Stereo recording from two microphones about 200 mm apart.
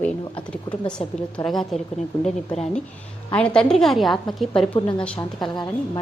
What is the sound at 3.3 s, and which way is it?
A woman's voice, 5° left (ahead or behind).